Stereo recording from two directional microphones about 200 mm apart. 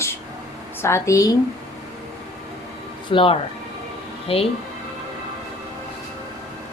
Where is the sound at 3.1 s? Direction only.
25° left (ahead or behind).